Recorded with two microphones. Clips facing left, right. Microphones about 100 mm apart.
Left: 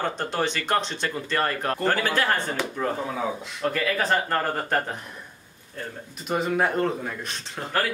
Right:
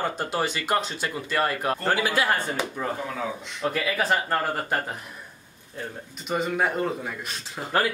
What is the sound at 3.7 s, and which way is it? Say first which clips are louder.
Speech: left 1 dB; 10° right (ahead or behind).